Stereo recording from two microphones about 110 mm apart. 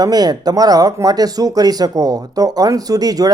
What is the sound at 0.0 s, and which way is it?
Speech, 35° right (ahead or behind).